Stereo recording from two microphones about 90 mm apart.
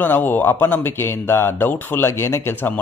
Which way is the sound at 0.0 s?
20° left (ahead or behind).